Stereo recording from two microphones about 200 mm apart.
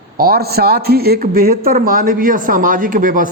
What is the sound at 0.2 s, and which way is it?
A man's voice, 50° right (ahead or behind).